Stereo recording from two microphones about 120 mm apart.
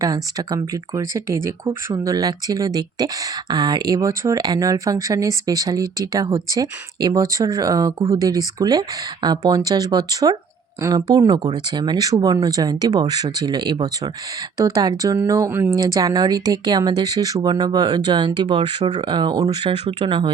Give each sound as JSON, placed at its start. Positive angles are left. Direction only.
{"t": 0.0, "sound": "speech", "side_deg": -30}